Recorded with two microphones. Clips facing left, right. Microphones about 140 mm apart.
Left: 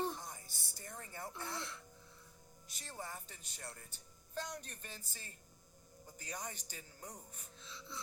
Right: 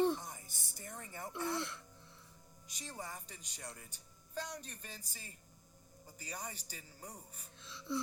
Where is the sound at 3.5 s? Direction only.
15° right (ahead or behind).